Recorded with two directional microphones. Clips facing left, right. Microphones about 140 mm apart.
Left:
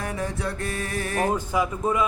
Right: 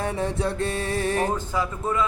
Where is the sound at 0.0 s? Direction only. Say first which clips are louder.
Right 3 dB; 30° right (ahead or behind).